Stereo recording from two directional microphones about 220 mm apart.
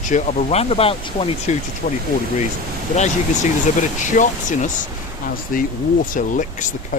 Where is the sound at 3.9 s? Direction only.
35° left (ahead or behind).